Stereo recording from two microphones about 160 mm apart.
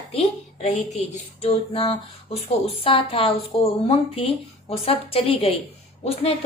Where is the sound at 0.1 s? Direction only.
40° left (ahead or behind).